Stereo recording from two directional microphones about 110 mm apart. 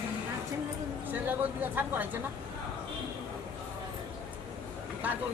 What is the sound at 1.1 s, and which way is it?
Speech, 15° right (ahead or behind).